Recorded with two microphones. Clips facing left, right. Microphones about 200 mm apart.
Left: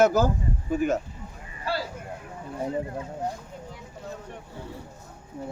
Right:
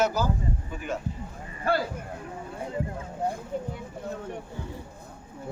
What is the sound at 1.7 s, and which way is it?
Speech, 50° right (ahead or behind).